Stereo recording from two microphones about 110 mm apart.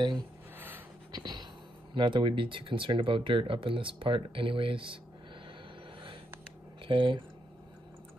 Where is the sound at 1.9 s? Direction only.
50° right (ahead or behind).